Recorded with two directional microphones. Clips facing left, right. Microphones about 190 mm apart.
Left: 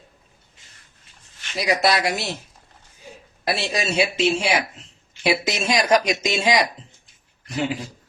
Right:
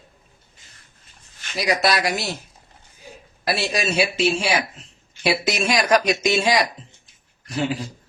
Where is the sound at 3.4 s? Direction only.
20° left (ahead or behind).